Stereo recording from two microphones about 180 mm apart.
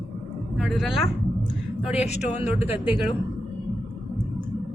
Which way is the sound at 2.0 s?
40° left (ahead or behind).